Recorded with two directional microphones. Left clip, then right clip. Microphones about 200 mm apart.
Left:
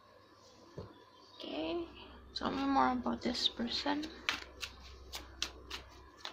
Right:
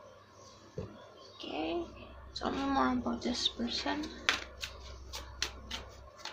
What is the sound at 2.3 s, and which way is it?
Speech, 35° left (ahead or behind).